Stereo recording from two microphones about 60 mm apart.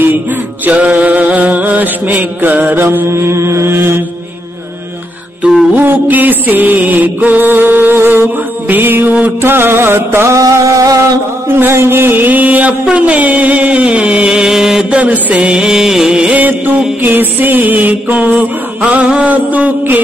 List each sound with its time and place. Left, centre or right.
0.7 s mantra: right
2.1 s music: right
3.1 s mantra: right
5.8 s mantra: right
9.4 s music: right
10.3 s a sound: right
11.4 s music: right
12.9 s mantra: right
15.0 s mantra: right
17.0 s mantra: right